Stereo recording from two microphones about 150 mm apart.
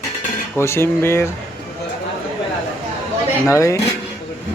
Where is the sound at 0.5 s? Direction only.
15° left (ahead or behind).